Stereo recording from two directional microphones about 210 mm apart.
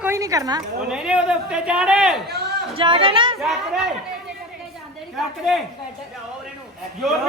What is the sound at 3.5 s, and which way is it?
Speech, 5° right (ahead or behind).